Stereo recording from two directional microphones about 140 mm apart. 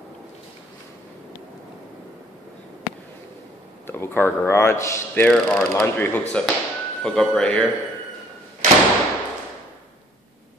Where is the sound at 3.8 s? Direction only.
15° left (ahead or behind).